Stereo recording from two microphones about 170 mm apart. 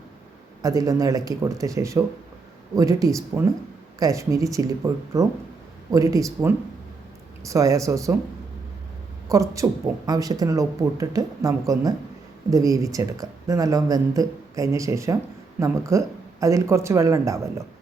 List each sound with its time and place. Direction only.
0.6 s speech: 20° right (ahead or behind)
9.3 s speech: 20° right (ahead or behind)